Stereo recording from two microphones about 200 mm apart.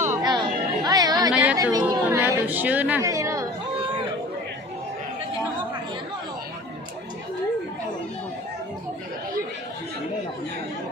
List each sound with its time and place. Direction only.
0.1 s chatter: 20° right (ahead or behind)
1.3 s chatter: 5° right (ahead or behind)
1.5 s a woman's voice: 15° right (ahead or behind)